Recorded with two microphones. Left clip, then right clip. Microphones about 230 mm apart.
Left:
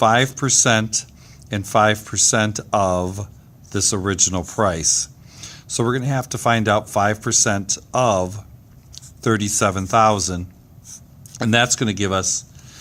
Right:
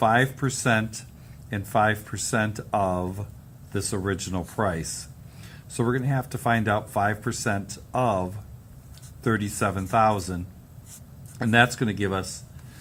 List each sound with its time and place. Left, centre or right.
0.0 s speech: left